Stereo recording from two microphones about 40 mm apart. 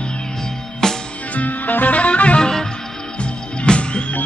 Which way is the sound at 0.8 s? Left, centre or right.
Centre.